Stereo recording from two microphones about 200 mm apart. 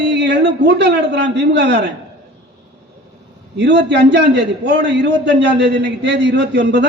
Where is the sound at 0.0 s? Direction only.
60° right (ahead or behind).